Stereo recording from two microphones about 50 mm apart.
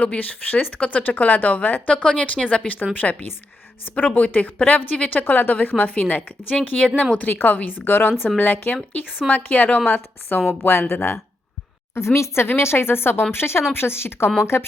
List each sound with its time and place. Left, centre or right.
0.0 s a woman's voice: left
9.9 s a woman's voice: left